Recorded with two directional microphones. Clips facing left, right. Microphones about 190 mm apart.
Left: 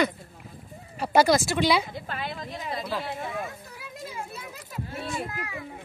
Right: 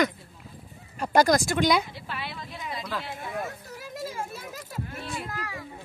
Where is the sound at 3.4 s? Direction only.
45° right (ahead or behind).